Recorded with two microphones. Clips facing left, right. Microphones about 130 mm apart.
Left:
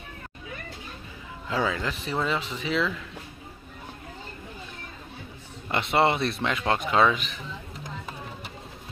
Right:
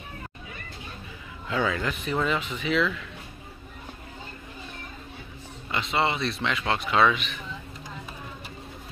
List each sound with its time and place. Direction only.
1.5 s speech: 30° left (ahead or behind)
5.7 s speech: 55° left (ahead or behind); by 7.3 s 35° left (ahead or behind)